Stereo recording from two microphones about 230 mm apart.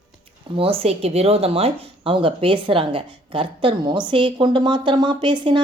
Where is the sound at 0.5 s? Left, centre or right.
Right.